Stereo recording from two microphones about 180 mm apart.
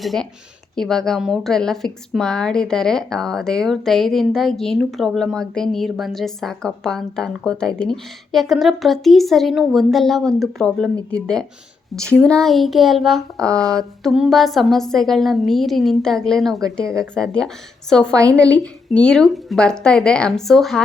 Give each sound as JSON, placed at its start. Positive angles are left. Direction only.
{"t": 0.0, "sound": "a woman's voice", "side_deg": 0}
{"t": 16.8, "sound": "speech", "side_deg": -15}
{"t": 17.2, "sound": "a woman's voice", "side_deg": 5}